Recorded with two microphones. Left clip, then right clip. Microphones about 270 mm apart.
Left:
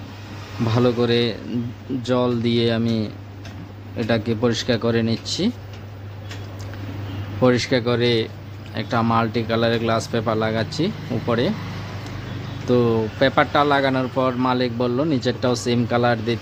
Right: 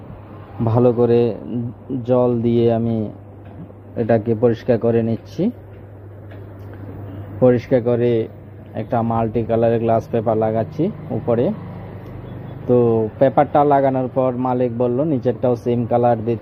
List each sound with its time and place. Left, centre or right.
0.7 s speech: centre
1.0 s speech: centre
2.4 s speech: centre
7.4 s speech: centre
12.6 s speech: centre